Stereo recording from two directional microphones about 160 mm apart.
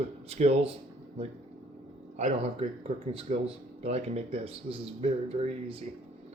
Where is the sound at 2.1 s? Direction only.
45° right (ahead or behind).